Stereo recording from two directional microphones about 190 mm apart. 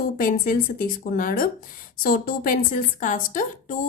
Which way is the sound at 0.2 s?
45° left (ahead or behind).